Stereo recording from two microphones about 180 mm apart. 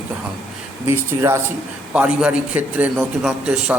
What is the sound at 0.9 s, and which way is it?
A man's voice, 15° right (ahead or behind).